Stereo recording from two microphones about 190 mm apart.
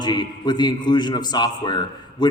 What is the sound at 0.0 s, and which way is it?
A man's voice, 20° left (ahead or behind).